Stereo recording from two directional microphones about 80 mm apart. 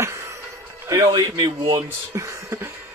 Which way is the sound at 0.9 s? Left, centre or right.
Right.